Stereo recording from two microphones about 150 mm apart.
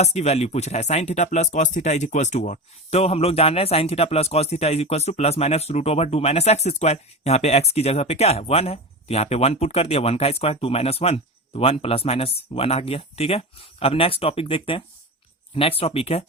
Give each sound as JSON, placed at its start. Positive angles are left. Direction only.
{"t": 0.0, "sound": "speech", "side_deg": 45}